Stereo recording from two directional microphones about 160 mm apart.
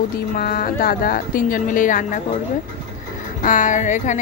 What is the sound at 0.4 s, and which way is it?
A woman's voice, 70° left (ahead or behind).